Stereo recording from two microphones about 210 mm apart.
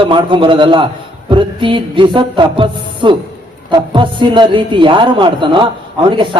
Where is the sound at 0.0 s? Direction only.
25° right (ahead or behind).